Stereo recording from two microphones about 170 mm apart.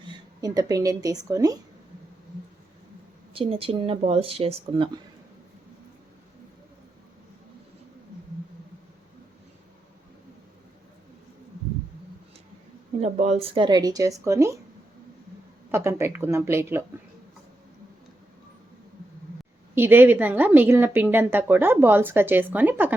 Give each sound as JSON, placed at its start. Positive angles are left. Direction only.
{"t": 0.4, "sound": "speech", "side_deg": -20}
{"t": 3.3, "sound": "speech", "side_deg": -35}
{"t": 13.0, "sound": "speech", "side_deg": -40}
{"t": 15.7, "sound": "a woman's voice", "side_deg": -15}
{"t": 19.7, "sound": "a woman's voice", "side_deg": -10}